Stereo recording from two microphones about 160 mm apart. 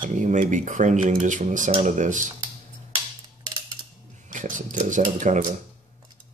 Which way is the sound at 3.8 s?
30° right (ahead or behind).